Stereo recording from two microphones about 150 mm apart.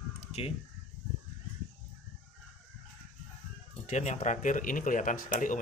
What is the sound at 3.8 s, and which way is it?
Speech, 50° left (ahead or behind).